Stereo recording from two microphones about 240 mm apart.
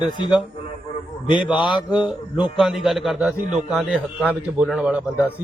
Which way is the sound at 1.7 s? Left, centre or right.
Centre.